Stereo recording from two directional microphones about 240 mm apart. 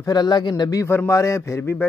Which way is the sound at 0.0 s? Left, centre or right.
Centre.